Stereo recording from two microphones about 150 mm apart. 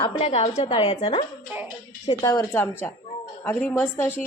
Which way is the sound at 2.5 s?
15° left (ahead or behind).